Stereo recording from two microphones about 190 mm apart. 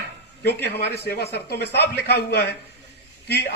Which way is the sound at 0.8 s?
60° left (ahead or behind).